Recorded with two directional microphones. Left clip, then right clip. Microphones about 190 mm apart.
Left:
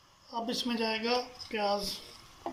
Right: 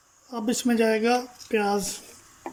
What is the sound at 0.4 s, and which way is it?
Speech, 55° right (ahead or behind).